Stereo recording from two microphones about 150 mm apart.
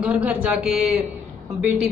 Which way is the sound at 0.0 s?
10° right (ahead or behind).